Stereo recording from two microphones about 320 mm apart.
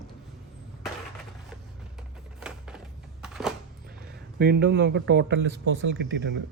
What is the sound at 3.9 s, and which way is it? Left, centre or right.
A man's voice, right.